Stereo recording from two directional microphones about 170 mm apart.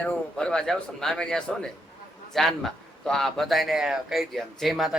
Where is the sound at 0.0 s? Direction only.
5° left (ahead or behind).